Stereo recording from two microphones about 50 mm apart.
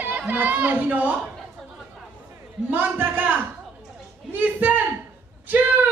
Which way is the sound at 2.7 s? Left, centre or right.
Right.